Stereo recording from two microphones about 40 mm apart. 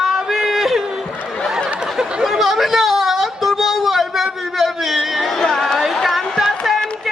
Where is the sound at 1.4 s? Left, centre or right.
Centre.